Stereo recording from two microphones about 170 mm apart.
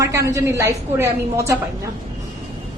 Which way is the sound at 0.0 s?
20° right (ahead or behind).